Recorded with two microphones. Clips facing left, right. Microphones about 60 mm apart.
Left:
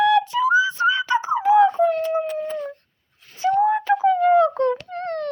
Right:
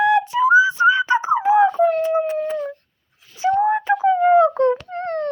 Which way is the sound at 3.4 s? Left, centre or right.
Right.